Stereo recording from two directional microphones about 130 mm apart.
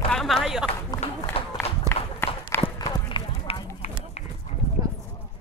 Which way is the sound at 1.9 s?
25° right (ahead or behind).